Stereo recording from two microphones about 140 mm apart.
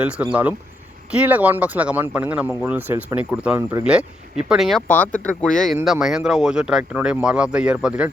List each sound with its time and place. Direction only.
0.0 s speech: 10° right (ahead or behind)
4.9 s speech: 10° left (ahead or behind); by 8.1 s 5° right (ahead or behind)